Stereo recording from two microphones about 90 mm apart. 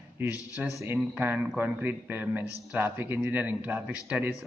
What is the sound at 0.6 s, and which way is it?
Speech, 15° right (ahead or behind).